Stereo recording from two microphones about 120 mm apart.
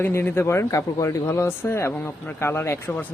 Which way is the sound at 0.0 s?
20° left (ahead or behind).